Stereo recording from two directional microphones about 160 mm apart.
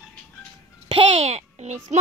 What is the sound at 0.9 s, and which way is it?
Speech, 35° right (ahead or behind).